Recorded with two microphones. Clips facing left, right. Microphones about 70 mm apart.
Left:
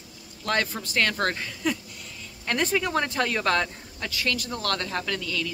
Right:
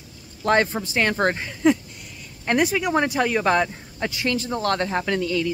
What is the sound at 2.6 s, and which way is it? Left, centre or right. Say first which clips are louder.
Speech: right 1 dB; centre.